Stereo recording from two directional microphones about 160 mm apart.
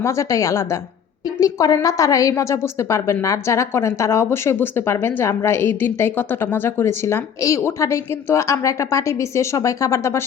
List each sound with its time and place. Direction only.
0.0 s a woman's voice: 20° left (ahead or behind)